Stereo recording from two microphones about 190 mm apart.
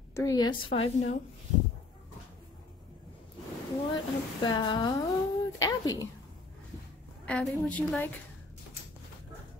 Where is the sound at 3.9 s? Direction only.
25° left (ahead or behind).